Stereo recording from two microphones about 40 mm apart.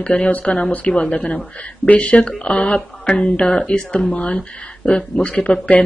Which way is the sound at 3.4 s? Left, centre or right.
Left.